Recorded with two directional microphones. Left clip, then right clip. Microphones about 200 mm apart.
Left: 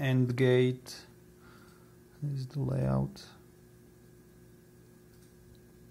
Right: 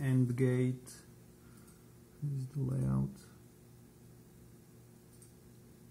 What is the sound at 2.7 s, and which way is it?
Speech, 30° left (ahead or behind).